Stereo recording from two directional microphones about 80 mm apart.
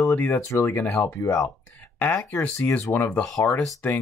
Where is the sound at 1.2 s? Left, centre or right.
Left.